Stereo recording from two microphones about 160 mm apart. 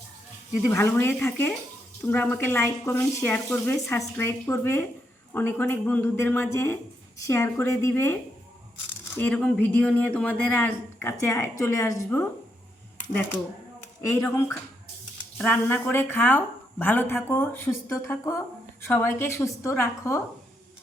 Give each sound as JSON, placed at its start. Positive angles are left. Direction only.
{"t": 0.6, "sound": "speech", "side_deg": 15}
{"t": 14.1, "sound": "speech", "side_deg": 15}